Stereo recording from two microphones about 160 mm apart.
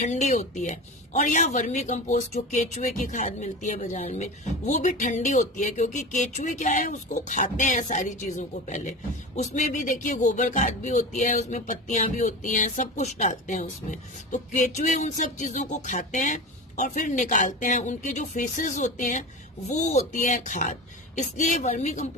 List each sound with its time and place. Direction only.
0.0 s speech: 50° left (ahead or behind)